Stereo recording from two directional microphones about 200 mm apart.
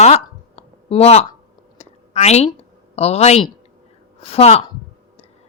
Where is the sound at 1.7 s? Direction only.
35° left (ahead or behind).